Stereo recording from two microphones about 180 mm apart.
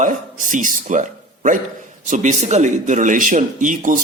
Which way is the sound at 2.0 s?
40° right (ahead or behind).